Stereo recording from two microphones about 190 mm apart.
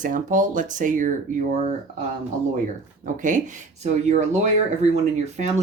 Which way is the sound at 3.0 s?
40° right (ahead or behind).